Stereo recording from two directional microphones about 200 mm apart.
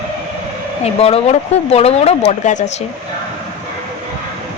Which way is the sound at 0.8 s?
30° left (ahead or behind).